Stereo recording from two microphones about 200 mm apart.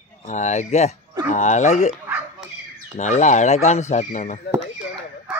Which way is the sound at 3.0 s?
35° left (ahead or behind).